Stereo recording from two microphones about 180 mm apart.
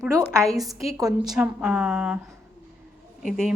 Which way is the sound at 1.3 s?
5° right (ahead or behind).